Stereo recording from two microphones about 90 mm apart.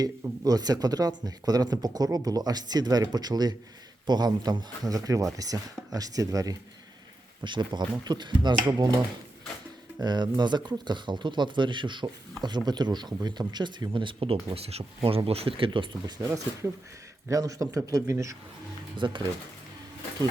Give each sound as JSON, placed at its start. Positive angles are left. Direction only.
{"t": 0.0, "sound": "speech", "side_deg": -45}
{"t": 7.4, "sound": "speech", "side_deg": -60}
{"t": 10.0, "sound": "speech", "side_deg": -50}
{"t": 16.2, "sound": "a man's voice", "side_deg": -35}
{"t": 18.9, "sound": "speech", "side_deg": -65}